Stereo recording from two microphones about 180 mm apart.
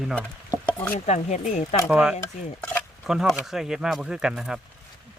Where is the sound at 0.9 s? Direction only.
40° left (ahead or behind).